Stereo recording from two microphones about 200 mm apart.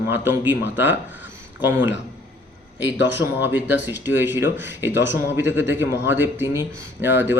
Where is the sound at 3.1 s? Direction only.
10° right (ahead or behind).